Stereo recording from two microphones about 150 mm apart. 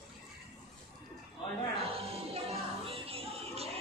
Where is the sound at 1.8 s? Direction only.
40° right (ahead or behind).